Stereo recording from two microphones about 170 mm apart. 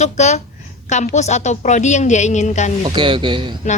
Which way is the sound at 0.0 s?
40° left (ahead or behind).